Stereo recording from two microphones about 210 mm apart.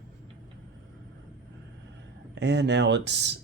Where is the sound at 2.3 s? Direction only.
55° right (ahead or behind).